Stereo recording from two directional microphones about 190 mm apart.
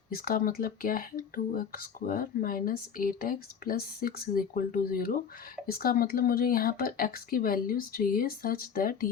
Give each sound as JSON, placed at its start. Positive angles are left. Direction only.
{"t": 0.1, "sound": "speech", "side_deg": 50}